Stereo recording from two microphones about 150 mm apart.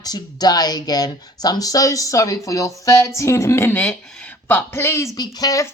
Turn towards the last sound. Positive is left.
turn(degrees=25)  # may be behind; listen again after turning